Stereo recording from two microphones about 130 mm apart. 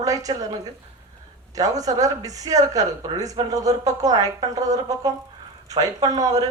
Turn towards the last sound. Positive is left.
turn(degrees=-30)  # may be behind; listen again after turning